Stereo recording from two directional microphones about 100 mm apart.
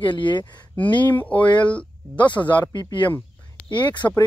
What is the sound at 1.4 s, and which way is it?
Speech, 50° left (ahead or behind).